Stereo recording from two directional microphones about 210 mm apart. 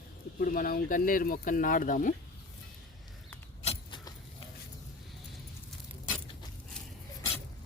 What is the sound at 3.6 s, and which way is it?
Keys jangling, 20° left (ahead or behind).